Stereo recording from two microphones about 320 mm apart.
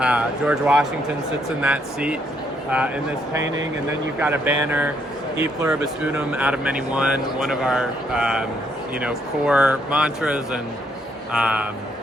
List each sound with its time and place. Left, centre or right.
0.0 s speech: centre
3.4 s speech: right
4.2 s speech: centre